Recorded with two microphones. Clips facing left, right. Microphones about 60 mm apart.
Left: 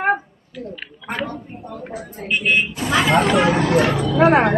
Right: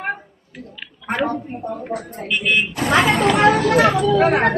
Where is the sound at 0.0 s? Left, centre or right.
Left.